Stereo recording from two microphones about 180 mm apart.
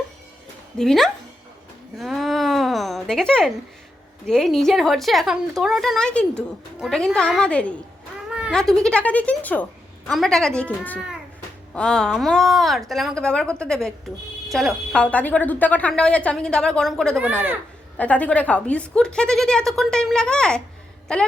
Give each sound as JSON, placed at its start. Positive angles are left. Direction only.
{"t": 0.8, "sound": "a woman's voice", "side_deg": 0}
{"t": 2.0, "sound": "a sound", "side_deg": 0}
{"t": 4.3, "sound": "a woman's voice", "side_deg": 0}
{"t": 8.3, "sound": "a woman's voice", "side_deg": -5}